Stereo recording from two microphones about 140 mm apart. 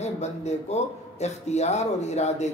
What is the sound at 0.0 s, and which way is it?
A man's voice, 55° left (ahead or behind).